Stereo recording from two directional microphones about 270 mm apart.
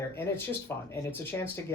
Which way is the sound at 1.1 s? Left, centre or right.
Centre.